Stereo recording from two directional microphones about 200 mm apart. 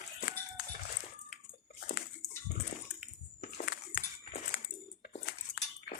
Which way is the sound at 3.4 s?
45° left (ahead or behind).